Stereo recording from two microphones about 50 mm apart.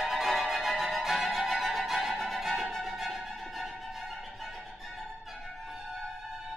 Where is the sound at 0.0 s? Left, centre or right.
Centre.